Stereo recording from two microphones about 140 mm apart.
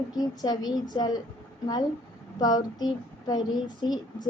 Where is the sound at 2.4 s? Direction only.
30° left (ahead or behind).